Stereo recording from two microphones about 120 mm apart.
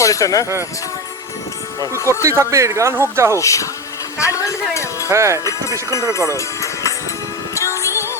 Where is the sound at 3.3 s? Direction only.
25° left (ahead or behind).